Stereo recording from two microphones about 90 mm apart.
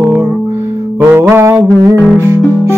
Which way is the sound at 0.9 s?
25° right (ahead or behind).